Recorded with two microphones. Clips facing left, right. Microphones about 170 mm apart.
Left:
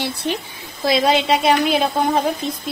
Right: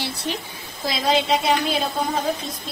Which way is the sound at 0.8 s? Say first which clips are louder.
Left 5 dB; 70° left (ahead or behind).